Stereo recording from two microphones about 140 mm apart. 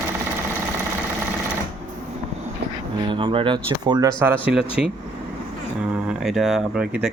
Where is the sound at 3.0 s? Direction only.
35° right (ahead or behind); by 4.4 s 15° right (ahead or behind).